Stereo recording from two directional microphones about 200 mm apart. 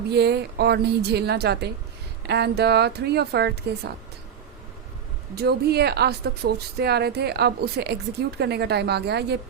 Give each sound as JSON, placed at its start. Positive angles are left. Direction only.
{"t": 0.1, "sound": "a woman's voice", "side_deg": -55}
{"t": 5.3, "sound": "a woman's voice", "side_deg": -55}